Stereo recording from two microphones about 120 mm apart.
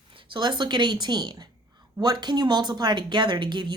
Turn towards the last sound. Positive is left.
turn(degrees=-40)  # may be behind; listen again after turning